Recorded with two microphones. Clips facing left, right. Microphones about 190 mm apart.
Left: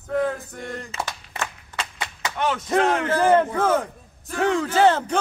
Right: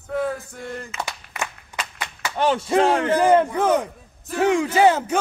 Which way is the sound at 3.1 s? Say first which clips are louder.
Right 1 dB; 15° right (ahead or behind).